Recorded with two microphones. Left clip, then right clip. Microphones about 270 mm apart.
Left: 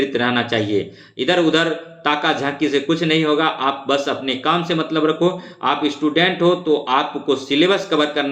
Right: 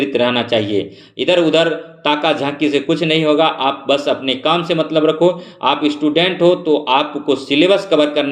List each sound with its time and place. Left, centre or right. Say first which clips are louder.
0.0 s a man's voice: right 3 dB; centre